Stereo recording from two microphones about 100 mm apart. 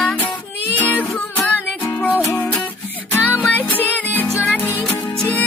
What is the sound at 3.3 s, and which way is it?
Music, 15° left (ahead or behind).